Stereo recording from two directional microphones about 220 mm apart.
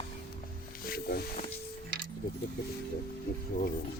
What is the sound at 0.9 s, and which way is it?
Music, 45° left (ahead or behind).